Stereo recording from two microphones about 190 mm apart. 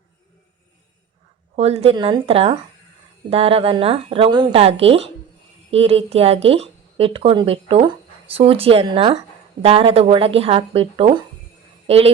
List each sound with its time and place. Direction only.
1.5 s a woman's voice: 30° right (ahead or behind)